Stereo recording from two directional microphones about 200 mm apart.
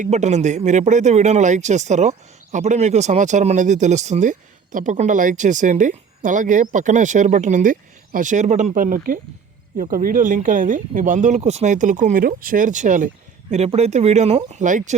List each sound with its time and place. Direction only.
0.0 s a man's voice: 35° right (ahead or behind)